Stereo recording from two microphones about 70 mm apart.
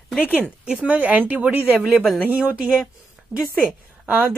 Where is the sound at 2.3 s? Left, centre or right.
Centre.